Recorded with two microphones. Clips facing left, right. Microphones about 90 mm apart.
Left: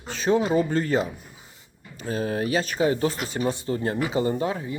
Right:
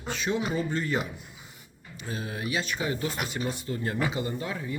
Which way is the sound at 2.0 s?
40° left (ahead or behind).